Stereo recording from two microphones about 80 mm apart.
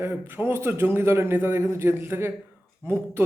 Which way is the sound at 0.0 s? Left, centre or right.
Right.